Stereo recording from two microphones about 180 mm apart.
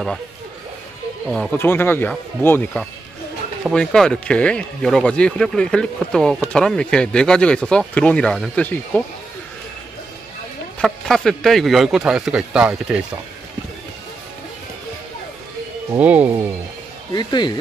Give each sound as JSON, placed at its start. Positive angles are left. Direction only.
{"t": 1.3, "sound": "speech", "side_deg": 5}
{"t": 10.8, "sound": "speech", "side_deg": 5}
{"t": 15.9, "sound": "speech", "side_deg": -5}
{"t": 17.1, "sound": "speech", "side_deg": 25}